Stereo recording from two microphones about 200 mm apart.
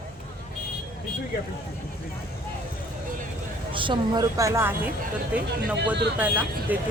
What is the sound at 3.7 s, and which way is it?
A woman's voice, 25° right (ahead or behind).